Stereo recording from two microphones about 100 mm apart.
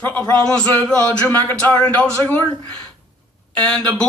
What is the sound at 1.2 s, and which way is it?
Speech, 20° left (ahead or behind).